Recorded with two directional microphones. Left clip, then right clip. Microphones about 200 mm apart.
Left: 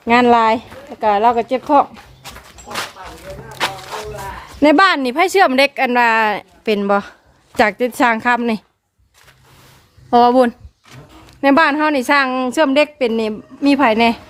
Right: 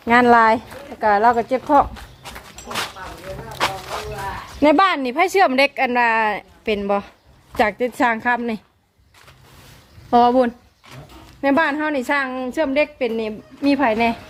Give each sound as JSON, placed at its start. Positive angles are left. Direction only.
{"t": 0.0, "sound": "speech", "side_deg": 5}
{"t": 4.6, "sound": "speech", "side_deg": 25}
{"t": 10.1, "sound": "a woman's voice", "side_deg": 15}